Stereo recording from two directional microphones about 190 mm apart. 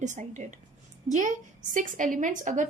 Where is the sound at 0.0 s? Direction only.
40° right (ahead or behind).